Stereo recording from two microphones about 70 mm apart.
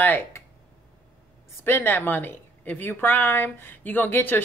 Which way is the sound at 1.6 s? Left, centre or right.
Left.